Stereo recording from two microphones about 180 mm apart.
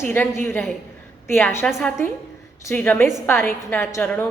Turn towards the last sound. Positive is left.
turn(degrees=10)  # may be behind; listen again after turning